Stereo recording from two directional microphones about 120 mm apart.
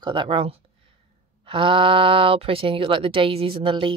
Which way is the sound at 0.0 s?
40° right (ahead or behind).